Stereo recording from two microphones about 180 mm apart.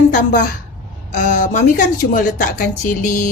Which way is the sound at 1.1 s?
45° left (ahead or behind).